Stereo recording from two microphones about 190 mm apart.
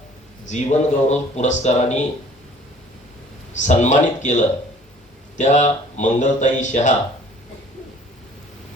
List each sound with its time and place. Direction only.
0.4 s speech: 40° left (ahead or behind)
3.6 s speech: 40° left (ahead or behind)